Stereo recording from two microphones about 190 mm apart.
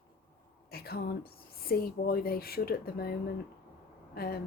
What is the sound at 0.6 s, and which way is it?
Speech, 55° left (ahead or behind).